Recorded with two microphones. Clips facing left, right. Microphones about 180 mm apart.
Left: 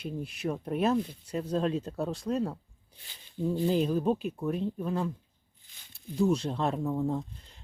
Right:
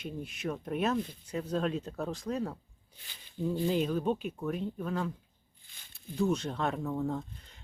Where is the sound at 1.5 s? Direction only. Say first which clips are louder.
Left 3 dB; 30° left (ahead or behind).